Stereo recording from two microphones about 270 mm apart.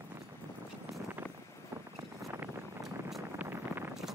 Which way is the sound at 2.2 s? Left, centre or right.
Centre.